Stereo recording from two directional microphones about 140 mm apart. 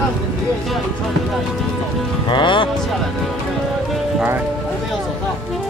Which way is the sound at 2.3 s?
35° left (ahead or behind).